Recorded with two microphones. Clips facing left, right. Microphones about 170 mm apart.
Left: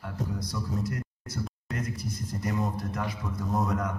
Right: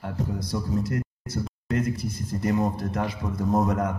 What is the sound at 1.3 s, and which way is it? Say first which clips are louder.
A man's voice: right 7 dB; 35° right (ahead or behind).